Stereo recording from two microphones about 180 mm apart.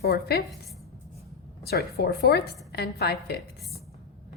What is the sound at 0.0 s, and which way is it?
Speech, 60° left (ahead or behind).